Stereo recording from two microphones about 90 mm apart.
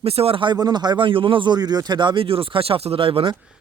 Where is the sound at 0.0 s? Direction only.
90° right.